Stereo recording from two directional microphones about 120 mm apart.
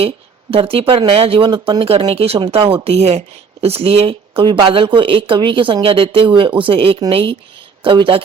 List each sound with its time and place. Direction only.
0.5 s speech: 50° right (ahead or behind)
1.8 s speech: 50° right (ahead or behind)